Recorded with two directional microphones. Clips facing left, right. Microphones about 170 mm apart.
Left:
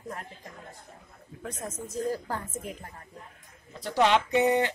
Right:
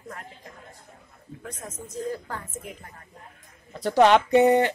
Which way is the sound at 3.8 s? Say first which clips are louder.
Right 6 dB; 60° right (ahead or behind).